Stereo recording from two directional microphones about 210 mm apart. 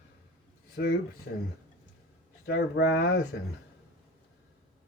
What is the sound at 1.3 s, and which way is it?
Speech, 50° left (ahead or behind).